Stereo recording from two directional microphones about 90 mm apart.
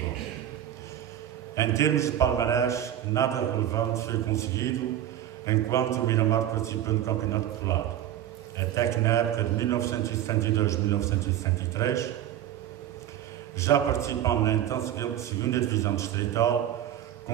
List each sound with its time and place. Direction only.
1.5 s a man's voice: 35° left (ahead or behind)
13.6 s a man's voice: 35° left (ahead or behind)